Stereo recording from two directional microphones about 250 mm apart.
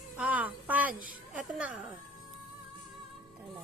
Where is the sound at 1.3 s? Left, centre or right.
Centre.